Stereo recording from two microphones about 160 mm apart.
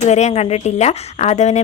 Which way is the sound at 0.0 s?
45° left (ahead or behind).